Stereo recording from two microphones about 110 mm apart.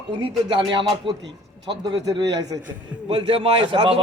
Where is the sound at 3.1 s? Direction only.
60° right (ahead or behind).